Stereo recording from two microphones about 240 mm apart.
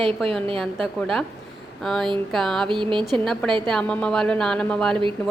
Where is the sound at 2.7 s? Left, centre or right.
Centre.